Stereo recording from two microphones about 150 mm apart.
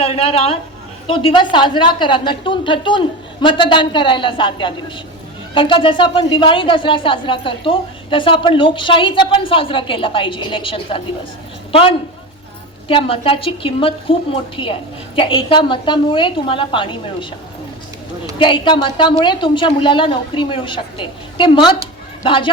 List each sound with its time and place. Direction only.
0.0 s speech: 40° left (ahead or behind)
18.3 s speech: 35° left (ahead or behind)